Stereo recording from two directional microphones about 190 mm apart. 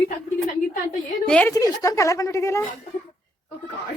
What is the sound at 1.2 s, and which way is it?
Speech, 5° left (ahead or behind).